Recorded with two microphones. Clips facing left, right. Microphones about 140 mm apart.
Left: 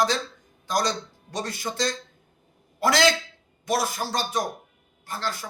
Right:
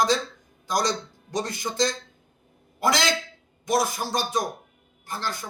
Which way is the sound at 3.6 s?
15° right (ahead or behind).